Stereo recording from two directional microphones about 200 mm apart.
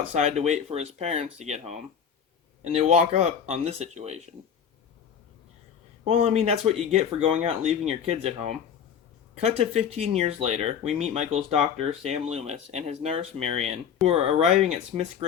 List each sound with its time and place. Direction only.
0.1 s speech: 30° right (ahead or behind)
6.1 s speech: 30° right (ahead or behind)